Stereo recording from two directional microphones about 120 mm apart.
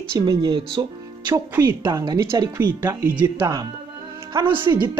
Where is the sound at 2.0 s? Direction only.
35° right (ahead or behind).